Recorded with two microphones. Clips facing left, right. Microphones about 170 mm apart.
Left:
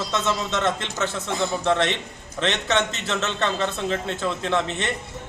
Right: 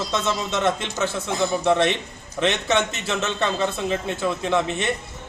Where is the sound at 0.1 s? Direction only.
15° right (ahead or behind).